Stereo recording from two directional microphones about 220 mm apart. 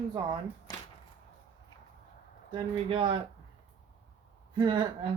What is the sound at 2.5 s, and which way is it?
Speech, 20° right (ahead or behind).